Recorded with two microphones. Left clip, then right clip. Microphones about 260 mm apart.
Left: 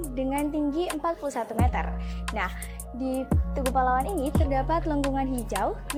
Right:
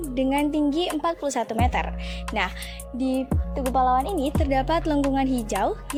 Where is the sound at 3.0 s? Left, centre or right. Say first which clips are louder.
Right 3 dB; right.